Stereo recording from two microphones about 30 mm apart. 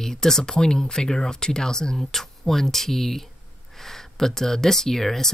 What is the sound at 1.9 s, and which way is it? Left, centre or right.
Speech, centre.